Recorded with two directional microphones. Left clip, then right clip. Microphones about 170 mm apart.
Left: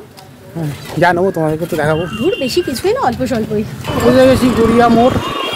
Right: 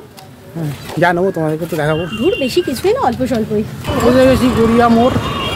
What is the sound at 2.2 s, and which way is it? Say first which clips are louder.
Speech: even; 10° right (ahead or behind).